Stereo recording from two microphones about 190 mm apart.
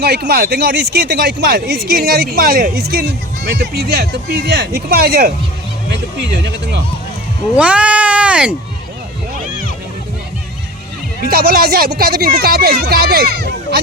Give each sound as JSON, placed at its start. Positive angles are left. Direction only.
{"t": 0.0, "sound": "speech", "side_deg": -55}
{"t": 5.9, "sound": "speech", "side_deg": -65}
{"t": 7.5, "sound": "speech", "side_deg": -5}
{"t": 11.3, "sound": "speech", "side_deg": -50}